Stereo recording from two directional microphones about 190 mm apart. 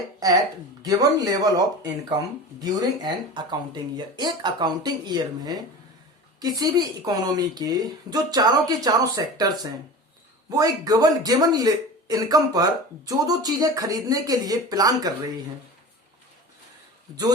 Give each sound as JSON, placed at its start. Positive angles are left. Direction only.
{"t": 0.8, "sound": "speech", "side_deg": -20}
{"t": 10.5, "sound": "speech", "side_deg": -20}